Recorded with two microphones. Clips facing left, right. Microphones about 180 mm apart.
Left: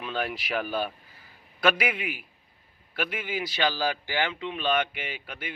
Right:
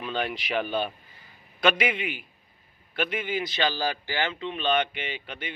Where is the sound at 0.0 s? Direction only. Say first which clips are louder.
Right 1 dB; 5° left (ahead or behind).